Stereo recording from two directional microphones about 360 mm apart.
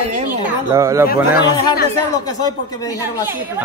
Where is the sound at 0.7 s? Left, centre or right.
Centre.